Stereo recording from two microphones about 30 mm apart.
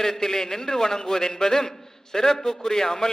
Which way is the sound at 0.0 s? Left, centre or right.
Centre.